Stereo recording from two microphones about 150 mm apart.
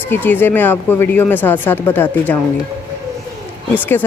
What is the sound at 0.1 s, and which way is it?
Speech, 15° left (ahead or behind).